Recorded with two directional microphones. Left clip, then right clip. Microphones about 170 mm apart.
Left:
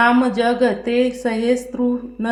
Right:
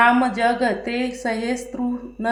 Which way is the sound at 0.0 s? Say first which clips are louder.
Left 1 dB; 20° left (ahead or behind).